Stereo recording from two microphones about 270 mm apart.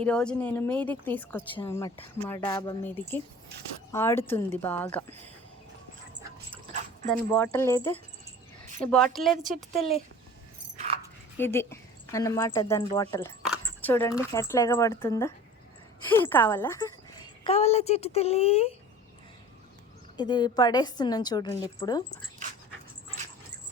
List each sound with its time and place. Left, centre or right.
0.0 s a woman's voice: centre
7.3 s a woman's voice: centre
8.8 s a woman's voice: centre
9.3 s a woman's voice: right
10.8 s dog: right
11.3 s a woman's voice: centre
20.1 s a woman's voice: centre
22.4 s dog: right